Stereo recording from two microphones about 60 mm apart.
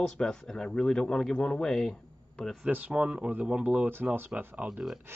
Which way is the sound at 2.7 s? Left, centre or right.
Right.